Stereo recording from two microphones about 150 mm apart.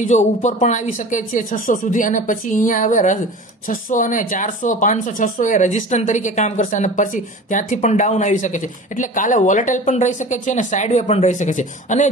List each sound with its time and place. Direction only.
0.0 s speech: 55° left (ahead or behind)